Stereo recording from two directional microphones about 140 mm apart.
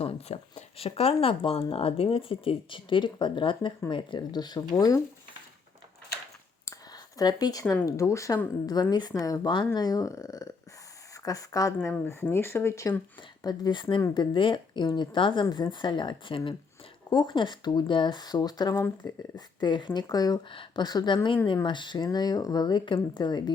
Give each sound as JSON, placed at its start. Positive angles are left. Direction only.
{"t": 0.0, "sound": "speech", "side_deg": 50}
{"t": 6.7, "sound": "a sound", "side_deg": 30}
{"t": 7.9, "sound": "speech", "side_deg": 20}
{"t": 13.4, "sound": "speech", "side_deg": 30}